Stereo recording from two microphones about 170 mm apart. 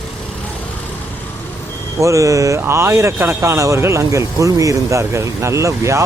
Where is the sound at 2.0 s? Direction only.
20° right (ahead or behind).